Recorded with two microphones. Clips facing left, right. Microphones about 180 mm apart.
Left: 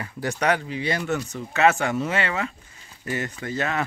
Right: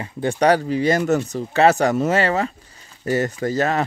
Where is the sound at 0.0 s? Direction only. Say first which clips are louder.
Right 7 dB; 30° right (ahead or behind).